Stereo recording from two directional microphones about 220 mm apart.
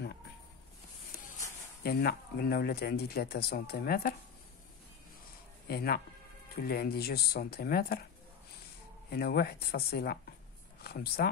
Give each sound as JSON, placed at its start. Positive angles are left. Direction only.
{"t": 1.8, "sound": "speech", "side_deg": 45}
{"t": 5.7, "sound": "speech", "side_deg": 45}
{"t": 9.1, "sound": "speech", "side_deg": 45}